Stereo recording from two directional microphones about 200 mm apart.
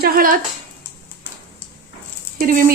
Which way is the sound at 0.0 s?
45° right (ahead or behind).